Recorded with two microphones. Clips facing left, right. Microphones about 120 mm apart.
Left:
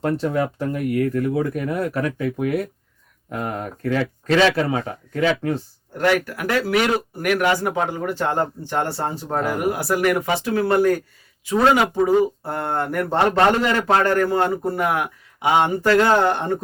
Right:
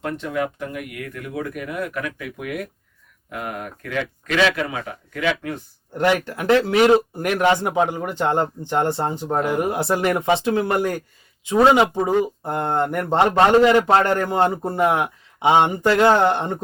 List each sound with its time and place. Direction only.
0.0 s speech: 35° left (ahead or behind)
6.0 s speech: 20° right (ahead or behind)